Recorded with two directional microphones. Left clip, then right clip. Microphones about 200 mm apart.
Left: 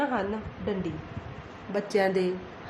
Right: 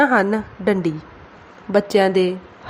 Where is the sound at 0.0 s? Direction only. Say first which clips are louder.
Right 13 dB; 35° right (ahead or behind).